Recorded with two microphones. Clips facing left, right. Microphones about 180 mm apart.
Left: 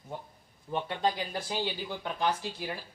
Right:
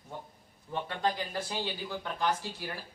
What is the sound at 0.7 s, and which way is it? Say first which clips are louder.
Speech: left 2 dB; 15° left (ahead or behind).